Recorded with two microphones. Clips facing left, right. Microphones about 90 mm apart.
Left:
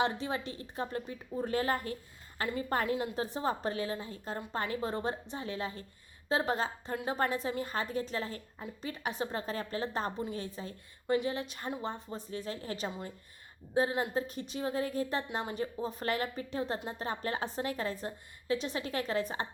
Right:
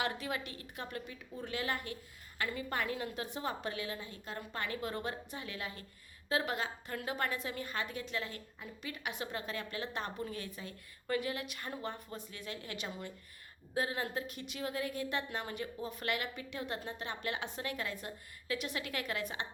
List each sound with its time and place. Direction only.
0.0 s a woman's voice: 30° left (ahead or behind)